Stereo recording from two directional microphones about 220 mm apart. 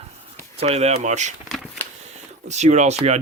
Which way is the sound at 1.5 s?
Centre (ahead or behind).